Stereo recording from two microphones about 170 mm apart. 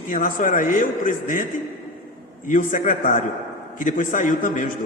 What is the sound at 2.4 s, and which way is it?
A man's voice, 50° left (ahead or behind).